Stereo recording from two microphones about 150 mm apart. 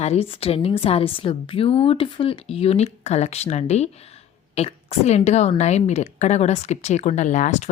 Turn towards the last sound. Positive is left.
turn(degrees=50)  # may be behind; listen again after turning